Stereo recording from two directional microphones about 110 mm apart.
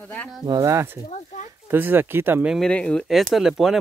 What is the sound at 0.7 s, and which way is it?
Speech, 20° right (ahead or behind).